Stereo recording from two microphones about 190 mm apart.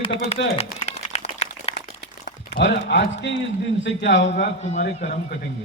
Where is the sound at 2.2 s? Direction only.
60° left (ahead or behind).